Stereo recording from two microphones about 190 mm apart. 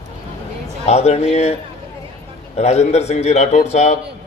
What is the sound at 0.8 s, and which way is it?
A man's voice, 35° left (ahead or behind).